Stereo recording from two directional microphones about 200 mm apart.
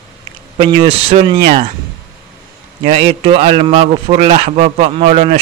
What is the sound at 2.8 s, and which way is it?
Speech, 30° right (ahead or behind).